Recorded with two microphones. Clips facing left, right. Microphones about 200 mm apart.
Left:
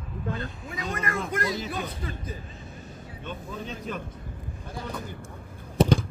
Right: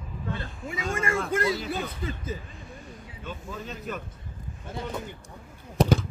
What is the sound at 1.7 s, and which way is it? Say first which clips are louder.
Speech: right 2 dB; 25° right (ahead or behind).